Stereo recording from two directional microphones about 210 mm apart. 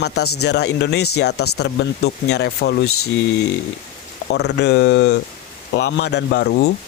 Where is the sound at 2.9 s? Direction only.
90° left.